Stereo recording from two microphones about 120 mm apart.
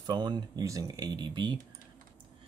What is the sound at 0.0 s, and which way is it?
Speech, 40° right (ahead or behind).